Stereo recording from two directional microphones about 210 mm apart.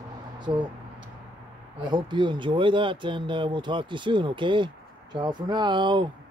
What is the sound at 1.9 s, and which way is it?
Speech, 20° right (ahead or behind).